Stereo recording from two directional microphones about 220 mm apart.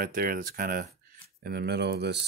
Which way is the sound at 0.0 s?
40° right (ahead or behind).